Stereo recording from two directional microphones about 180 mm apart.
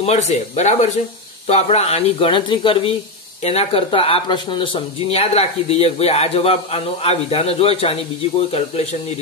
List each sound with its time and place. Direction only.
0.0 s speech: 35° left (ahead or behind)